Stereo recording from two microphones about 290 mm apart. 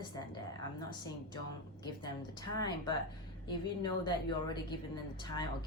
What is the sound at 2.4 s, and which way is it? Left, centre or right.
A woman's voice, centre.